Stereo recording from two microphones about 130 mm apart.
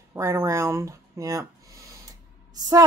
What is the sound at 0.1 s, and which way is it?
Speech, 20° right (ahead or behind).